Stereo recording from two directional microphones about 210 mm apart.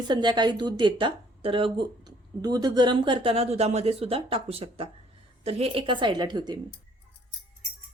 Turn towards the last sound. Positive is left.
turn(degrees=-20)  # may be behind; listen again after turning